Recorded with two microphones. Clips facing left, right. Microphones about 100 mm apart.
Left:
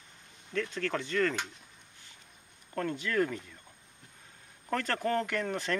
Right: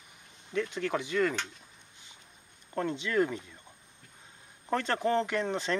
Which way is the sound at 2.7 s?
20° right (ahead or behind).